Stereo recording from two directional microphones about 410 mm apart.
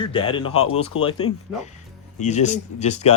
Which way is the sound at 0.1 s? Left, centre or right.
Centre.